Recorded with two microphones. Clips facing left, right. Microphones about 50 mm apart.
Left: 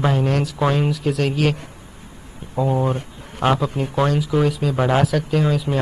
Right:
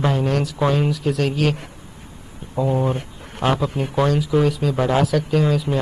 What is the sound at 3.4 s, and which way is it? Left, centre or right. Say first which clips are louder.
A man's voice: left 1 dB; centre.